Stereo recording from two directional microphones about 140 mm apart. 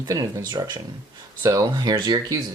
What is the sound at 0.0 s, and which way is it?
Speech, 25° right (ahead or behind).